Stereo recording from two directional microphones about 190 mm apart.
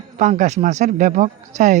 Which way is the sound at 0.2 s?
40° right (ahead or behind).